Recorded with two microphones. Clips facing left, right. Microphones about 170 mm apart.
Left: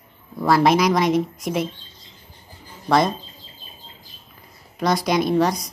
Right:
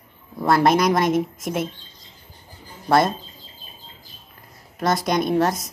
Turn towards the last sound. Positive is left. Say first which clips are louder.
# left 1 dB
turn(degrees=0)  # may be behind; listen again after turning